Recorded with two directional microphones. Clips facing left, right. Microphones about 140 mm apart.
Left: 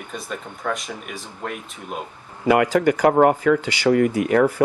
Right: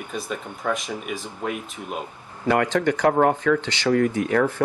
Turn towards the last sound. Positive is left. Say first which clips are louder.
# left 4 dB
turn(degrees=10)  # may be behind; listen again after turning